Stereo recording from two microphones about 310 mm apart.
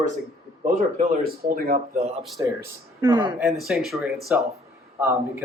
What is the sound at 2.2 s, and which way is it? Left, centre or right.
Speech, centre.